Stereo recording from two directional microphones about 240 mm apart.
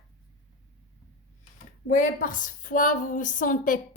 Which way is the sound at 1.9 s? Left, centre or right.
Left.